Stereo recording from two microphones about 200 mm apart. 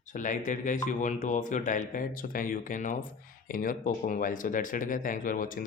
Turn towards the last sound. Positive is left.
turn(degrees=45)  # may be behind; listen again after turning